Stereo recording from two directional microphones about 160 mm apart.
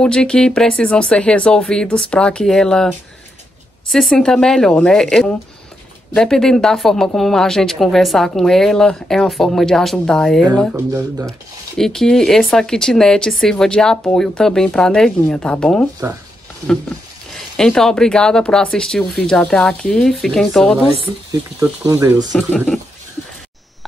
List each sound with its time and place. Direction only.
0.0 s speech: 5° left (ahead or behind)
11.7 s speech: 5° left (ahead or behind)
17.6 s speech: 5° left (ahead or behind)
21.0 s speech: 20° right (ahead or behind)